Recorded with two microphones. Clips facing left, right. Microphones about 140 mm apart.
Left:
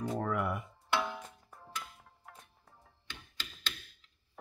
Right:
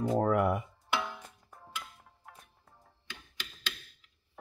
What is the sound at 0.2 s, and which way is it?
Music, 55° right (ahead or behind).